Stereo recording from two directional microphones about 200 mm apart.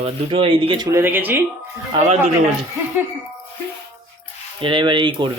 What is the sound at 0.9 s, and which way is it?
Speech, 10° right (ahead or behind).